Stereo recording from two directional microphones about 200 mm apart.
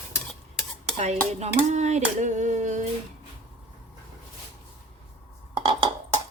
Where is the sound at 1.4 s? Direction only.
35° right (ahead or behind).